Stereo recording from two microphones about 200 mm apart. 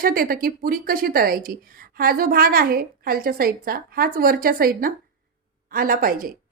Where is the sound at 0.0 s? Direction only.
45° right (ahead or behind).